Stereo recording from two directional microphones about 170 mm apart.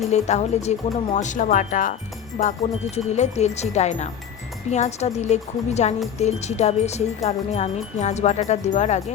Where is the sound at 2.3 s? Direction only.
40° left (ahead or behind).